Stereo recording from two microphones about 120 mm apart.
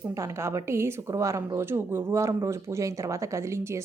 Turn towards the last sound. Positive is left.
turn(degrees=-25)  # may be behind; listen again after turning